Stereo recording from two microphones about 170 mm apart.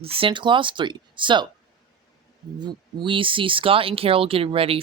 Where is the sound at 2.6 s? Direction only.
30° right (ahead or behind).